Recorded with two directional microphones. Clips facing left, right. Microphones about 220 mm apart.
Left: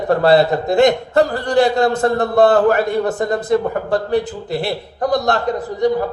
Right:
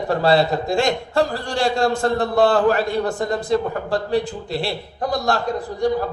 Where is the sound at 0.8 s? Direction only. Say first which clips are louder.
Left 8 dB; 20° left (ahead or behind).